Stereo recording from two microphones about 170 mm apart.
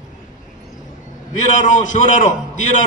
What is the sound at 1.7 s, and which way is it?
Speech, 45° left (ahead or behind).